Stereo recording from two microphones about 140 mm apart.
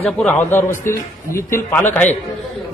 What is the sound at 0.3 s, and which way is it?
A man's voice, 15° left (ahead or behind).